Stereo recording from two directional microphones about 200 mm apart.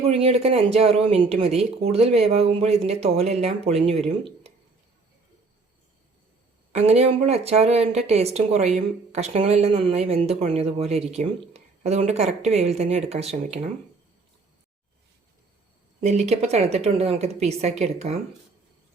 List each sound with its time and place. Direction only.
0.0 s speech: 30° right (ahead or behind)
6.7 s speech: 30° right (ahead or behind)
16.0 s speech: 35° right (ahead or behind)